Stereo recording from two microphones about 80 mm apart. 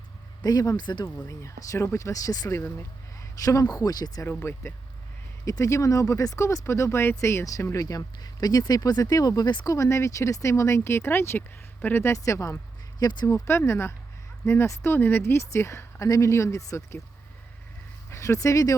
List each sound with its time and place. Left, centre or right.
0.4 s speech: left
1.3 s speech: left
5.5 s speech: left
7.9 s speech: left
9.6 s speech: left
12.1 s speech: left
13.0 s speech: left
13.2 s speech: left
18.1 s speech: left